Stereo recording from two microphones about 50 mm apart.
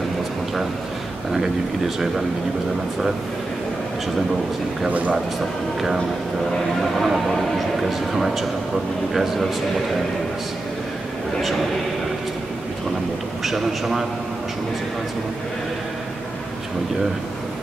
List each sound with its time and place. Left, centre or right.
4.8 s speech: right
6.8 s a man's voice: centre
13.4 s a man's voice: centre